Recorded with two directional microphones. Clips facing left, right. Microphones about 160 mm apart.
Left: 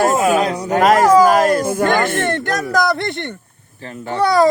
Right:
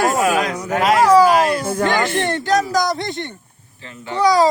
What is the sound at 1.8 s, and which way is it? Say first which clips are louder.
Speech: left 2 dB; 50° left (ahead or behind).